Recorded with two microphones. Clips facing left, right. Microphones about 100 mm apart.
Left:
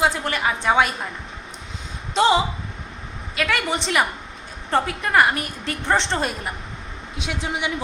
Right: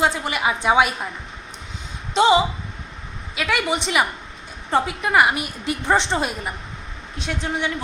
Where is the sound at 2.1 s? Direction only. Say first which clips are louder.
Right 2 dB; centre (ahead or behind).